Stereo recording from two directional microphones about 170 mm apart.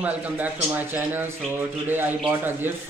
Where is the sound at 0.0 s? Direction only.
10° right (ahead or behind).